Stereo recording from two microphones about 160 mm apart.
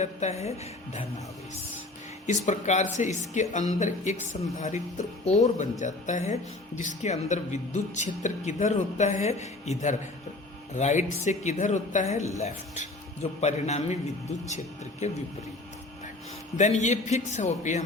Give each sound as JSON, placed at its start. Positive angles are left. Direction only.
{"t": 0.0, "sound": "speech", "side_deg": 45}
{"t": 2.2, "sound": "speech", "side_deg": 50}
{"t": 15.0, "sound": "speech", "side_deg": 45}
{"t": 16.6, "sound": "speech", "side_deg": 50}